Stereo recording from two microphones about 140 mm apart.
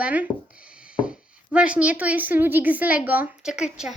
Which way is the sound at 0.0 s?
10° right (ahead or behind).